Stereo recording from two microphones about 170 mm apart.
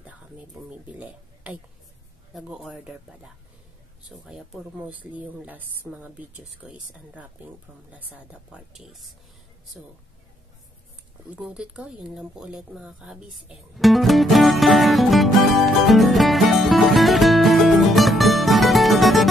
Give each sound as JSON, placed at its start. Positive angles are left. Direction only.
{"t": 0.7, "sound": "speech", "side_deg": -10}
{"t": 4.1, "sound": "speech", "side_deg": 0}
{"t": 11.2, "sound": "a sound", "side_deg": -5}